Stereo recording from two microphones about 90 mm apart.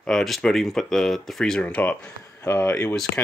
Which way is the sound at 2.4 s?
30° left (ahead or behind).